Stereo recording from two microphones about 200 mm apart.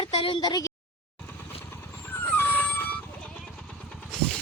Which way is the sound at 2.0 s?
10° left (ahead or behind).